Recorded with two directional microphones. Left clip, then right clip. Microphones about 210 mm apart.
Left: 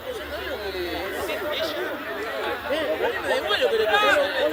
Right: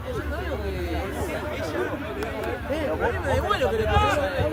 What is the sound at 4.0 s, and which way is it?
Chatter, 60° left (ahead or behind).